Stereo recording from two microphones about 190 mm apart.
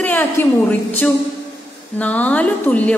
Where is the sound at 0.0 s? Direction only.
10° left (ahead or behind).